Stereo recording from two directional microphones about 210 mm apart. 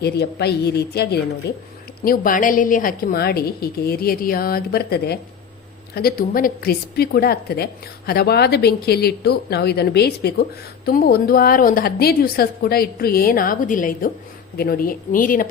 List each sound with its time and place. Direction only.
0.0 s a woman's voice: 50° left (ahead or behind)